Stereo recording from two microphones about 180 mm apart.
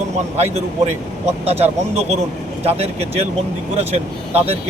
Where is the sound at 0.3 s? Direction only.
35° right (ahead or behind).